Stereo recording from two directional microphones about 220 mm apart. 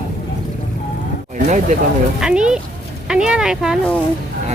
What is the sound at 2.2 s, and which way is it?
Speech, 5° right (ahead or behind).